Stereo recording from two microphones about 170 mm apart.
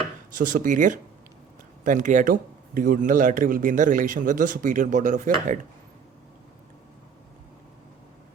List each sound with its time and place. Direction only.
0.3 s a man's voice: 50° right (ahead or behind)